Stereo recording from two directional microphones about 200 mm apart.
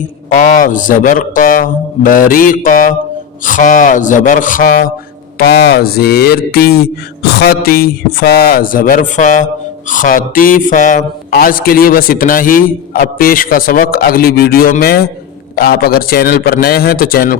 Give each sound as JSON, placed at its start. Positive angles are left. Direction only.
{"t": 0.3, "sound": "speech", "side_deg": 40}